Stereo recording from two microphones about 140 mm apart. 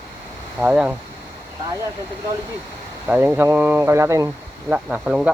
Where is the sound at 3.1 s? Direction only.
15° right (ahead or behind).